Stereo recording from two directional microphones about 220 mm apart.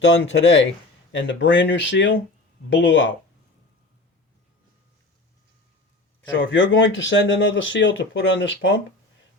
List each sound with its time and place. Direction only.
0.0 s speech: 55° left (ahead or behind)
6.3 s speech: 55° left (ahead or behind)